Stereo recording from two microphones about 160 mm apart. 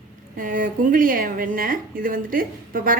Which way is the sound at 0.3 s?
55° right (ahead or behind).